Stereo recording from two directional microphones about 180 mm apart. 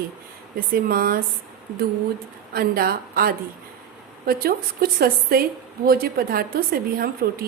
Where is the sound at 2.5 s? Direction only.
55° right (ahead or behind).